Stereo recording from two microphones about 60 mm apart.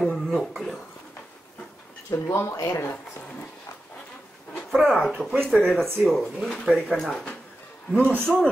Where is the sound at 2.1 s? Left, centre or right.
Left.